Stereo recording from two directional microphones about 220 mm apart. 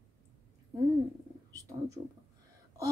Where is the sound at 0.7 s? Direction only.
15° right (ahead or behind).